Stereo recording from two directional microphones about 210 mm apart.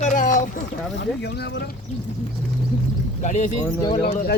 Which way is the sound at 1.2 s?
55° left (ahead or behind).